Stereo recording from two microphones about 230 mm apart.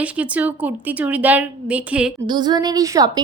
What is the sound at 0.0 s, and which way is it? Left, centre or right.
A woman's voice, centre.